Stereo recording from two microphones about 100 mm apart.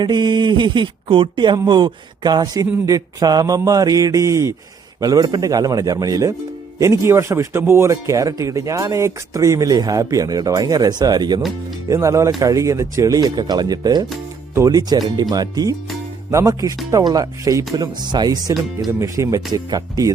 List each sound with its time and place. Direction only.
0.0 s a man's voice: 50° right (ahead or behind)
11.9 s speech: 30° right (ahead or behind)
17.7 s speech: 45° right (ahead or behind)